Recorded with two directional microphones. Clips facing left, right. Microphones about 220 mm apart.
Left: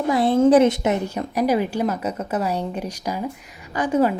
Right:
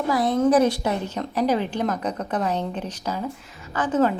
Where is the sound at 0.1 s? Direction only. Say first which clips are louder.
Left 4 dB; 25° left (ahead or behind).